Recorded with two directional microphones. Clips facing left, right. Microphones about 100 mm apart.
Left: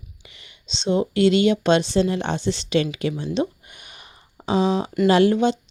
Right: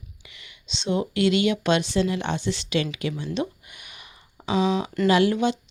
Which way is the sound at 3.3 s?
30° left (ahead or behind).